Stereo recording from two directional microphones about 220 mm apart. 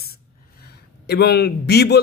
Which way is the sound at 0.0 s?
45° left (ahead or behind).